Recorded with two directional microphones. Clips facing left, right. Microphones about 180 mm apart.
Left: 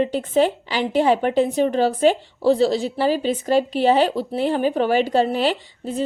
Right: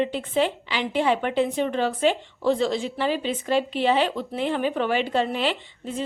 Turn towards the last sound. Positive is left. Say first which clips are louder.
# left 5 dB
turn(degrees=40)  # may be behind; listen again after turning